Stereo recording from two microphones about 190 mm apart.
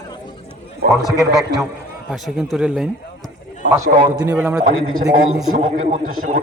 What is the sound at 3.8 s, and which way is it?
Speech, 25° right (ahead or behind).